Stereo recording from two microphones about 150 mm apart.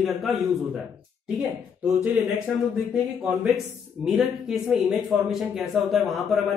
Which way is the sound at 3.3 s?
Centre (ahead or behind).